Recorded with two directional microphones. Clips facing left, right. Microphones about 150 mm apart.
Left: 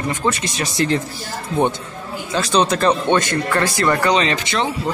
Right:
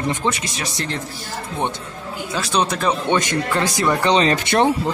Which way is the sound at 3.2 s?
15° right (ahead or behind).